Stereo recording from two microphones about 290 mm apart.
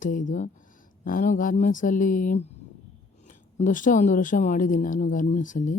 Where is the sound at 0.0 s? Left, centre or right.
Left.